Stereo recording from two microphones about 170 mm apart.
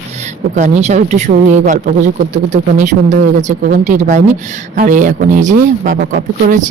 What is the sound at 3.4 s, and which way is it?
Speech, 45° right (ahead or behind).